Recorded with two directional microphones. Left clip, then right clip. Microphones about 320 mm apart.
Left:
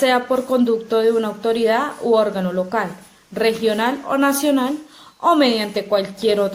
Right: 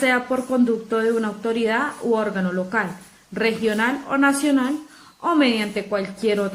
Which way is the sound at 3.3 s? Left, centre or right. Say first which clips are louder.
Left 3 dB; centre.